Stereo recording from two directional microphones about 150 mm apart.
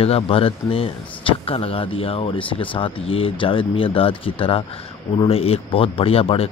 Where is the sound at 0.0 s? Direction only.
40° left (ahead or behind).